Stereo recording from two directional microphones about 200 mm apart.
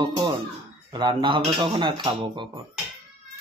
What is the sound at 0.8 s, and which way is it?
Speech, 20° right (ahead or behind).